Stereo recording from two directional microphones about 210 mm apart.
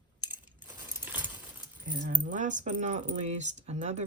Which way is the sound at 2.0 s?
40° right (ahead or behind).